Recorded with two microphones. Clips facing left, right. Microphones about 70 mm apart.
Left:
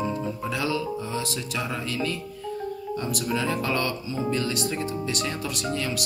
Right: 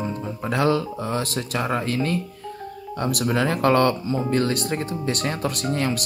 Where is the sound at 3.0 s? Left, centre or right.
Right.